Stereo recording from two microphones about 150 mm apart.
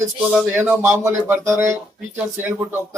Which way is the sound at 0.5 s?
10° right (ahead or behind).